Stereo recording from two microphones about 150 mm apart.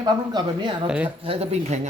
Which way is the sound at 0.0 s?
30° right (ahead or behind).